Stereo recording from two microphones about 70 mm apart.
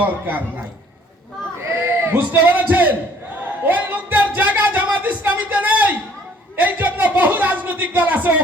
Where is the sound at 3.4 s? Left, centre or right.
Right.